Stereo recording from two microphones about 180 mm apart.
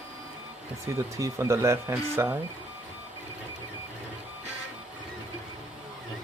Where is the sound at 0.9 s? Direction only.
15° right (ahead or behind).